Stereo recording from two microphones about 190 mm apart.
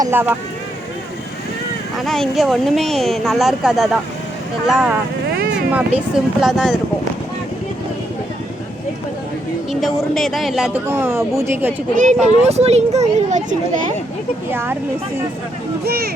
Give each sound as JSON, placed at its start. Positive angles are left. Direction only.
{"t": 0.0, "sound": "a woman's voice", "side_deg": -10}
{"t": 2.0, "sound": "speech", "side_deg": 0}
{"t": 9.8, "sound": "speech", "side_deg": 0}
{"t": 10.8, "sound": "a woman's voice", "side_deg": -10}
{"t": 12.2, "sound": "speech", "side_deg": -35}
{"t": 14.5, "sound": "a woman's voice", "side_deg": -10}
{"t": 15.8, "sound": "speech", "side_deg": -55}